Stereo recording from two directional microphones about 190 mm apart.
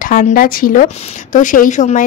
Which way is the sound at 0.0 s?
50° left (ahead or behind).